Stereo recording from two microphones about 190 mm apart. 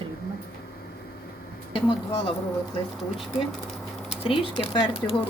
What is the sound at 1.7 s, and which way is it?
Speech, 30° left (ahead or behind).